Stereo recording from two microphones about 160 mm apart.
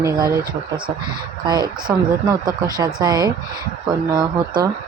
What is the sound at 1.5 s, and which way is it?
A woman's voice, 25° right (ahead or behind).